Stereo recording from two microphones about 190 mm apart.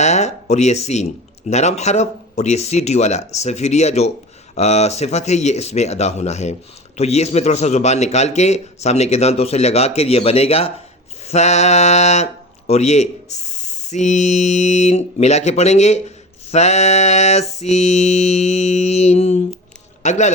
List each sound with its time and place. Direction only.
0.0 s a man's voice: 35° left (ahead or behind)